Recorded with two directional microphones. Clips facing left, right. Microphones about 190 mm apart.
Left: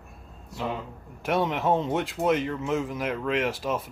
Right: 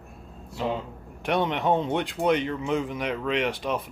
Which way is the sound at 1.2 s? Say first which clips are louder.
Even; centre (ahead or behind).